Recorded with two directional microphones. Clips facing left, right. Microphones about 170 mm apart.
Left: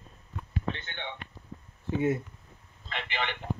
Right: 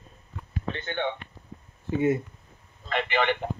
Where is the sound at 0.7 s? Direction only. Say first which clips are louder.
Right 11 dB; 50° right (ahead or behind).